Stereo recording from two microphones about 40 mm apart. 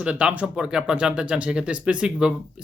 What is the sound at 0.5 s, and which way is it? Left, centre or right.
Speech, centre.